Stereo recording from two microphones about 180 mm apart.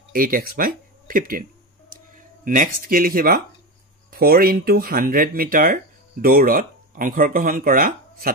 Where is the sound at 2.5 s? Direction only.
50° right (ahead or behind).